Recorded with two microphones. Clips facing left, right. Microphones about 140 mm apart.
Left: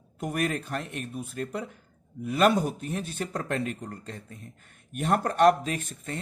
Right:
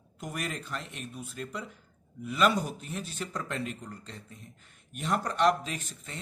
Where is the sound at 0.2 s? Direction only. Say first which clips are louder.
Left 8 dB; 50° left (ahead or behind).